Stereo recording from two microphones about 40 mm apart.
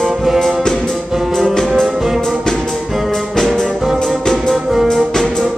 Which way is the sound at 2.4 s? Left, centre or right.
Centre.